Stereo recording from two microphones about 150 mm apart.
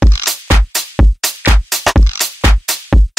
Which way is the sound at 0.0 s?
Centre (ahead or behind).